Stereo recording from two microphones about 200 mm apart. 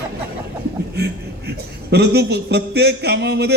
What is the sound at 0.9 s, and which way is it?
A man's voice, 55° right (ahead or behind).